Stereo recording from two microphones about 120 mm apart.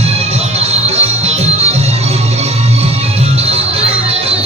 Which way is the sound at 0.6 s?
60° right (ahead or behind).